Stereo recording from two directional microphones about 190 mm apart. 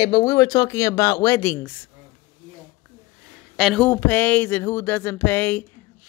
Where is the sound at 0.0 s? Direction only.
20° left (ahead or behind).